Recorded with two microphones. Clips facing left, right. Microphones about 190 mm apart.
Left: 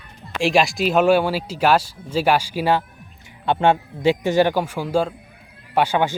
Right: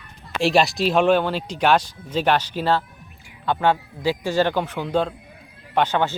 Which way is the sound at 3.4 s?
25° left (ahead or behind).